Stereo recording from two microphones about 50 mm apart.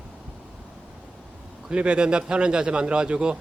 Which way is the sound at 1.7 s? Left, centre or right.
Centre.